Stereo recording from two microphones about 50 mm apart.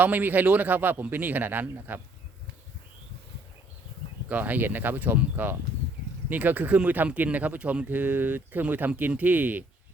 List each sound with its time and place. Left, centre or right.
0.0 s a man's voice: right
4.3 s a man's voice: right
7.9 s a man's voice: right